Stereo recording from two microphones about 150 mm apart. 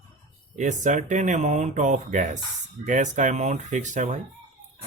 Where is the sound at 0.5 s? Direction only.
55° right (ahead or behind).